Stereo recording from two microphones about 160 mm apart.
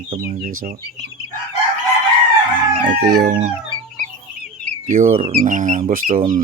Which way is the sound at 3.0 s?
90° right.